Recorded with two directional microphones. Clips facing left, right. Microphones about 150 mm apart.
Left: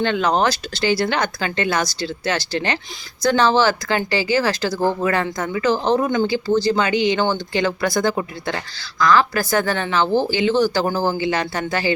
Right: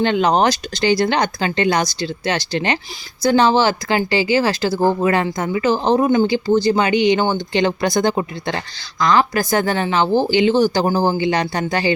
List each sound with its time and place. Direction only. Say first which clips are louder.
0.0 s speech: right 3 dB; 20° right (ahead or behind)